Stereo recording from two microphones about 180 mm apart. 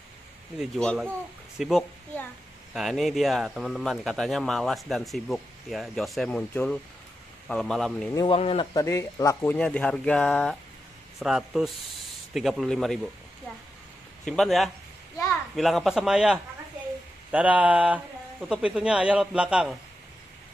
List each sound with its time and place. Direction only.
0.6 s speech: centre (ahead or behind)
8.1 s speech: 20° left (ahead or behind)
8.4 s a man's voice: 35° left (ahead or behind)
8.7 s speech: 15° left (ahead or behind)
14.2 s speech: centre (ahead or behind)